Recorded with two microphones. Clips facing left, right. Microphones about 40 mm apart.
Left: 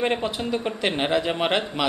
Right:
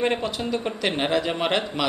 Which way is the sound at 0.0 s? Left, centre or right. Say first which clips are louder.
Even; centre.